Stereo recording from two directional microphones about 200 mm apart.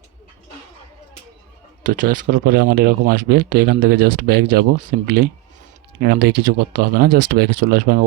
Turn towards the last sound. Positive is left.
turn(degrees=-45)  # may be behind; listen again after turning